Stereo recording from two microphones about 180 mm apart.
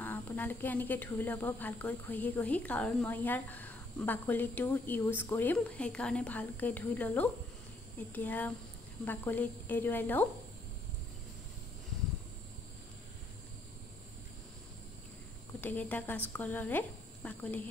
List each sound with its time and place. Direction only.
0.0 s a woman's voice: 10° left (ahead or behind)
15.6 s a woman's voice: 10° left (ahead or behind)